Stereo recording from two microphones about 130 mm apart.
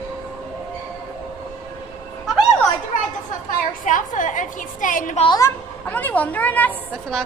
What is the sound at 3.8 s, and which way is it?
A woman's voice, 80° left.